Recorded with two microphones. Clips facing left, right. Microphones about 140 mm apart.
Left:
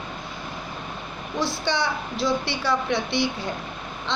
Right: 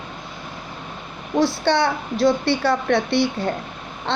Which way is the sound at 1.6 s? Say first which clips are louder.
Right 6 dB; 55° right (ahead or behind).